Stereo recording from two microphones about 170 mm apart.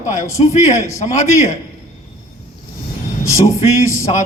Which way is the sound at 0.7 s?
20° left (ahead or behind).